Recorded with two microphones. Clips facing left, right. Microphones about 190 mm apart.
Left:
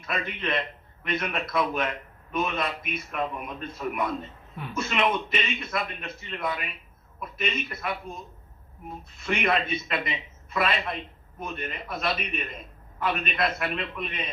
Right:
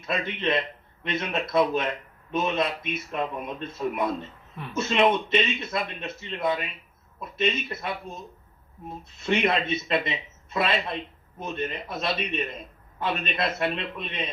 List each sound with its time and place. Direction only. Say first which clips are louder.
0.0 s speech: right 4 dB; 25° right (ahead or behind)
9.2 s speech: right 2 dB; 25° right (ahead or behind)